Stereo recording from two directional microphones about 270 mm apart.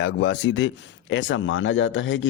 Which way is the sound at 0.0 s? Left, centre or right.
Left.